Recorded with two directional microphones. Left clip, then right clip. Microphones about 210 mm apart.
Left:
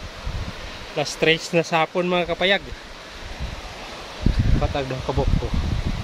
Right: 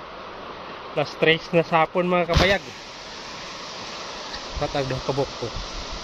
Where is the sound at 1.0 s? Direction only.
15° left (ahead or behind).